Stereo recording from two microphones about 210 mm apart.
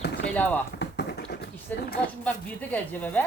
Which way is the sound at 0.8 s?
50° left (ahead or behind).